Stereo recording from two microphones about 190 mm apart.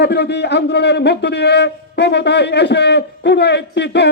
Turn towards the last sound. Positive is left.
turn(degrees=65)  # may be behind; listen again after turning